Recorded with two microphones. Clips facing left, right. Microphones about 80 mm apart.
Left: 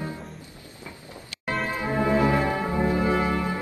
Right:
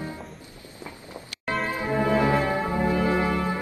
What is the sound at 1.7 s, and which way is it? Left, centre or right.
Music, left.